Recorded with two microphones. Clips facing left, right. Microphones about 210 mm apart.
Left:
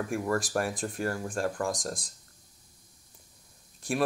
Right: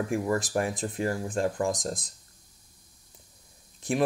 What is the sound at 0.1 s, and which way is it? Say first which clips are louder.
Speech: even; 20° right (ahead or behind).